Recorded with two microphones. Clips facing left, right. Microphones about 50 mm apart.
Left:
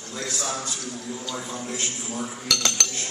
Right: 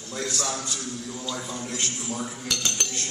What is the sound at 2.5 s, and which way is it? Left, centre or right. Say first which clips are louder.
Speech: left 5 dB; left.